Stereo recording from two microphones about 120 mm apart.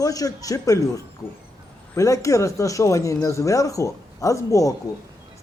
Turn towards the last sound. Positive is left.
turn(degrees=30)  # may be behind; listen again after turning